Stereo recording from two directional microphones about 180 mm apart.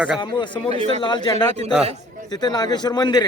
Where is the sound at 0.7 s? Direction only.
35° right (ahead or behind).